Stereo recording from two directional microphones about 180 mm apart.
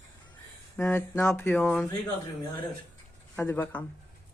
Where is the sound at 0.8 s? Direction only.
10° left (ahead or behind).